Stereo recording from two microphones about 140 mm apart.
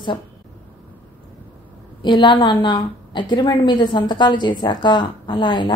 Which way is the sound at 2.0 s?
35° left (ahead or behind).